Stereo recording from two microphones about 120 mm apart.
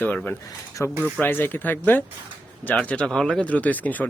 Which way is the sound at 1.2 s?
15° left (ahead or behind).